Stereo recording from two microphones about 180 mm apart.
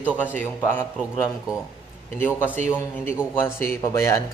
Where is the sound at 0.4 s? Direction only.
10° left (ahead or behind).